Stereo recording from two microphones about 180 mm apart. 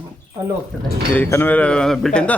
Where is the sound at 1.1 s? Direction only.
10° left (ahead or behind).